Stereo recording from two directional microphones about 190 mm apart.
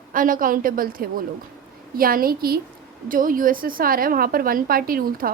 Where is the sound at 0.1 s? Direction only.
45° right (ahead or behind).